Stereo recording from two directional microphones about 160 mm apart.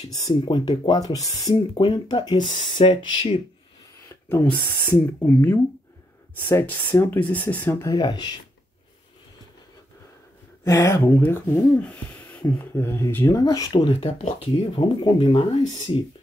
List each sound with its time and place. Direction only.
0.1 s speech: 25° left (ahead or behind)
4.3 s speech: 10° left (ahead or behind)
7.9 s speech: 25° left (ahead or behind)
10.6 s speech: 20° left (ahead or behind)